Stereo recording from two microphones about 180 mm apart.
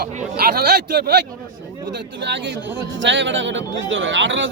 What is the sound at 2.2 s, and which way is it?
A man's voice, 80° right.